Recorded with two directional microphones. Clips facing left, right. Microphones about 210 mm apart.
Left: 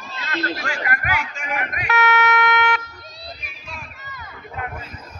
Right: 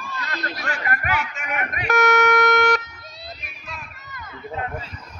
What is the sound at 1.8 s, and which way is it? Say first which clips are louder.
Speech: right 3 dB; 45° right (ahead or behind).